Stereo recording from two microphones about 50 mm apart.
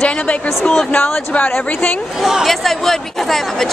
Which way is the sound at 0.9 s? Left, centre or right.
Left.